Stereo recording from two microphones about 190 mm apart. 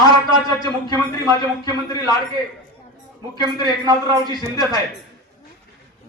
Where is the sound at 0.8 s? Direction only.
20° left (ahead or behind).